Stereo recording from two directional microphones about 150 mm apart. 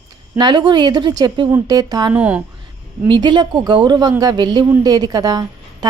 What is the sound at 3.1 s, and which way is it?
A woman's voice, 30° right (ahead or behind).